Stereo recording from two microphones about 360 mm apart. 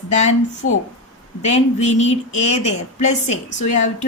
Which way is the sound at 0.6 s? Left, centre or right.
Left.